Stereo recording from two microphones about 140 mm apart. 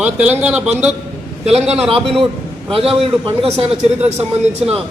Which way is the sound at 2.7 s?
40° right (ahead or behind).